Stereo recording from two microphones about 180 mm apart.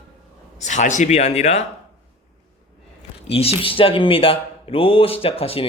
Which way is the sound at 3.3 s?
35° left (ahead or behind).